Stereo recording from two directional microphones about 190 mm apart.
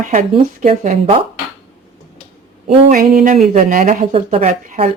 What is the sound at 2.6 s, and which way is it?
Speech, 30° right (ahead or behind).